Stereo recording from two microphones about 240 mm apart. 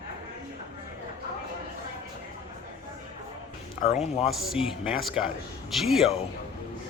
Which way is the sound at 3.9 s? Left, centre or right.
Left.